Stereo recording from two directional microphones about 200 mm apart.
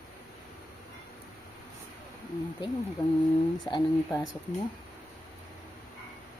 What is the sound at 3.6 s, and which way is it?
Speech, 20° left (ahead or behind).